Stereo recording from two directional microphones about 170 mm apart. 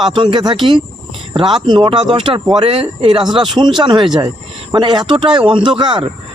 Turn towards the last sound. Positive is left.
turn(degrees=-25)  # may be behind; listen again after turning